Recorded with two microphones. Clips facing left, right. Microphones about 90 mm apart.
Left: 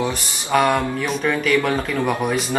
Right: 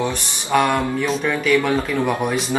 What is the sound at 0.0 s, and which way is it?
Speech, centre (ahead or behind).